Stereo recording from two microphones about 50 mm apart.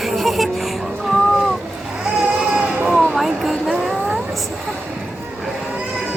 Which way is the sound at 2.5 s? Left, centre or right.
Right.